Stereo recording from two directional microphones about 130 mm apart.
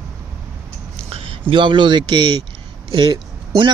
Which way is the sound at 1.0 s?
50° right (ahead or behind).